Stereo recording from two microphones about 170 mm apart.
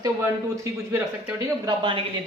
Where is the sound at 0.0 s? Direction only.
20° right (ahead or behind).